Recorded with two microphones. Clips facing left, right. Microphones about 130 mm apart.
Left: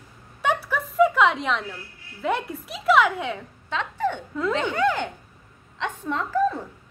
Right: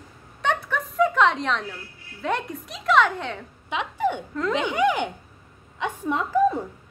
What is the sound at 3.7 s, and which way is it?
A woman's voice, 15° right (ahead or behind).